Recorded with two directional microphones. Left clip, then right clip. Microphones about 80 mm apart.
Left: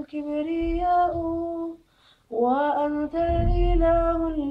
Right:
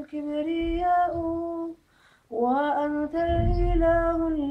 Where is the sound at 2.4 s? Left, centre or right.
Centre.